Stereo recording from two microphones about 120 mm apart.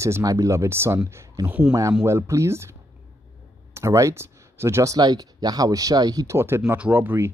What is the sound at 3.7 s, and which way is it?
Speech, 25° right (ahead or behind).